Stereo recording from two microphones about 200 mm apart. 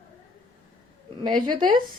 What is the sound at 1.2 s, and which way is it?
Speech, 25° right (ahead or behind).